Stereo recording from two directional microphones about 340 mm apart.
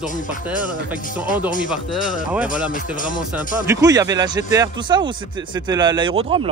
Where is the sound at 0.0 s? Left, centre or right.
Left.